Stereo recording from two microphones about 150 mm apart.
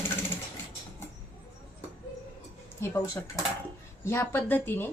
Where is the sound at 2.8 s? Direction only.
20° left (ahead or behind).